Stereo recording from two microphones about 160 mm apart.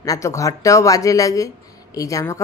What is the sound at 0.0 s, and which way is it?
Speech, 20° left (ahead or behind).